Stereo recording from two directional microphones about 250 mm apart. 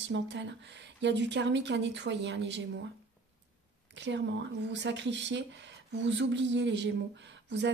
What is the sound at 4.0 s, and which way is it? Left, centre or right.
Speech, right.